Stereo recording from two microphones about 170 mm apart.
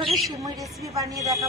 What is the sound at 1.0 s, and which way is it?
Speech, 20° right (ahead or behind).